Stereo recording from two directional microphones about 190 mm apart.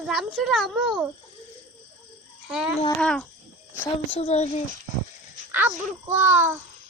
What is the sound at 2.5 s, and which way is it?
Speech, 5° right (ahead or behind).